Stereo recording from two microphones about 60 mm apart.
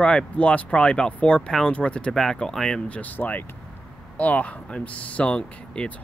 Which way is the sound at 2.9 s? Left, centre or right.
Left.